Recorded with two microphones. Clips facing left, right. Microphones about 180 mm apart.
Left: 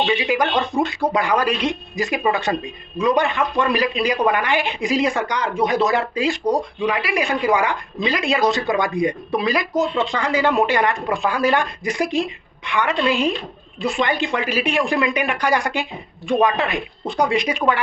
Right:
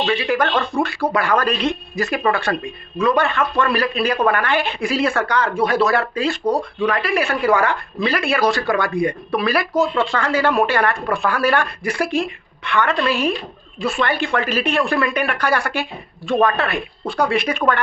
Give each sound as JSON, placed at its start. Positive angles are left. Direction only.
{"t": 0.0, "sound": "speech", "side_deg": 15}